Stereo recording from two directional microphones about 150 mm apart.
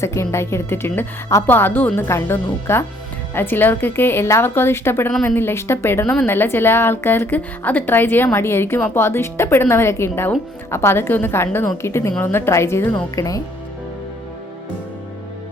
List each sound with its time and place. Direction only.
0.0 s a woman's voice: 20° left (ahead or behind)